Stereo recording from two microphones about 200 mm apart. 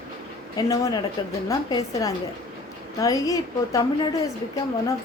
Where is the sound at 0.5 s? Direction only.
20° left (ahead or behind).